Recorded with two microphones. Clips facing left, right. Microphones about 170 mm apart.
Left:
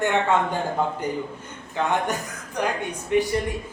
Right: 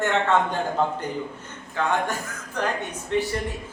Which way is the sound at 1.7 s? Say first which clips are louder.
Left 1 dB; 15° left (ahead or behind).